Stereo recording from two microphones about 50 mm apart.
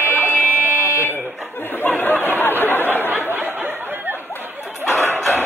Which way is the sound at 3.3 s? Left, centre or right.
Right.